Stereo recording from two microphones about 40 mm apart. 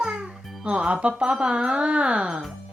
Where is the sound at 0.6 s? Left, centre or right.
Right.